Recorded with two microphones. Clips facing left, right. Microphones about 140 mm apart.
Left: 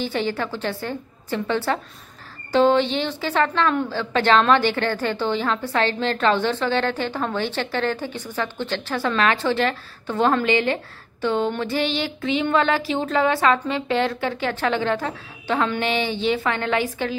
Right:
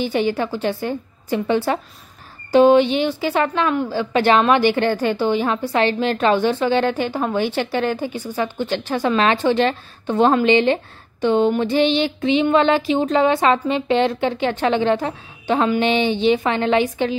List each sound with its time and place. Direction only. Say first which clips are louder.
0.0 s a woman's voice: right 5 dB; 15° right (ahead or behind)